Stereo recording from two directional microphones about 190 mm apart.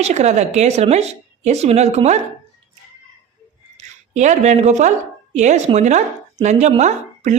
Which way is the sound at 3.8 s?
40° right (ahead or behind).